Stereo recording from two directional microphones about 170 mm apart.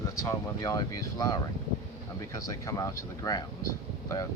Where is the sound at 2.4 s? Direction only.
20° left (ahead or behind).